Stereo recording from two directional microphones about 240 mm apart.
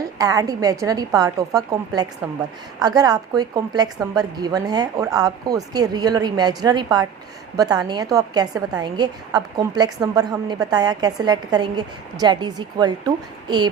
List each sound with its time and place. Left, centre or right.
0.2 s a woman's voice: centre